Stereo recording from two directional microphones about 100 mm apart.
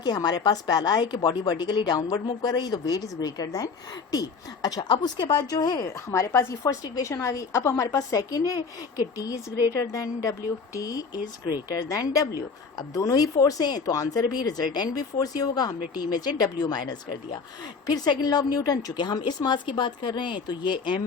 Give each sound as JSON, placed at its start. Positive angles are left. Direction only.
{"t": 0.0, "sound": "a woman's voice", "side_deg": 45}